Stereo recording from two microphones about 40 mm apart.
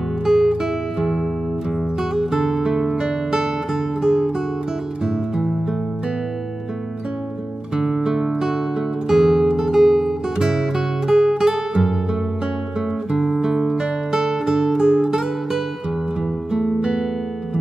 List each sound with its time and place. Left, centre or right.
0.2 s music: centre
5.0 s music: centre
7.7 s music: centre
13.2 s music: centre
16.5 s music: centre